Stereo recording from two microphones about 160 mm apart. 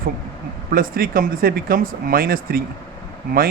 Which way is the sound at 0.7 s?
65° right (ahead or behind).